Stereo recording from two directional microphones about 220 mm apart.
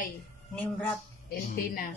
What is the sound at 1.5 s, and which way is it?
Speech, 40° left (ahead or behind).